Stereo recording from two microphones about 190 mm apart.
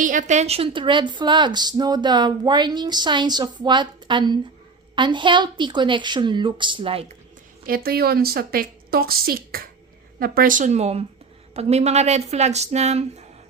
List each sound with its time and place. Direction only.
0.0 s a woman's voice: 45° right (ahead or behind)
7.6 s a woman's voice: 50° right (ahead or behind); by 13.2 s 35° right (ahead or behind)